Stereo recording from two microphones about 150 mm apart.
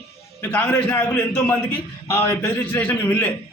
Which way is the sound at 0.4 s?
10° left (ahead or behind).